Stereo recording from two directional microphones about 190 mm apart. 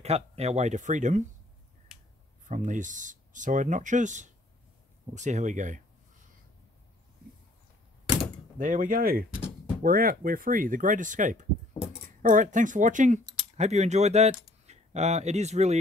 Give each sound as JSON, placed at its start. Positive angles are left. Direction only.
{"t": 0.0, "sound": "speech", "side_deg": -35}
{"t": 2.4, "sound": "speech", "side_deg": -40}
{"t": 8.5, "sound": "speech", "side_deg": -45}